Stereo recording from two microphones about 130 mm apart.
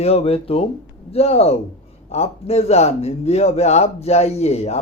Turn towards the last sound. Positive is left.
turn(degrees=55)  # may be behind; listen again after turning